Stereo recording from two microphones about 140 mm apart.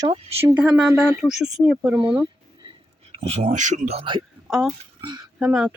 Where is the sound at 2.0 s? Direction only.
35° right (ahead or behind).